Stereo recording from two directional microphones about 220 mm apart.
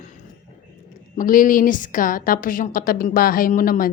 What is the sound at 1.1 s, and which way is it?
A woman's voice, 40° left (ahead or behind).